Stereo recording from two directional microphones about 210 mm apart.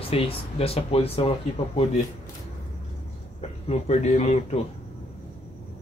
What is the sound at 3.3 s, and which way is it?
Speech, 30° left (ahead or behind).